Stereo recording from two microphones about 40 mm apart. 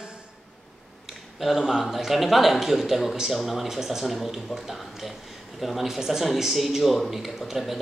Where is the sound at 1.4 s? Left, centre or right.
Centre.